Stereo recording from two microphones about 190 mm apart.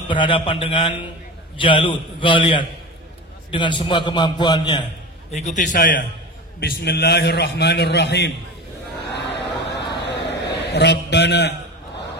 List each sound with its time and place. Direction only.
0.1 s a man's voice: 25° left (ahead or behind)
5.3 s a man's voice: 40° left (ahead or behind)
6.6 s a man's voice: 55° left (ahead or behind)
9.1 s a sound: 65° left (ahead or behind)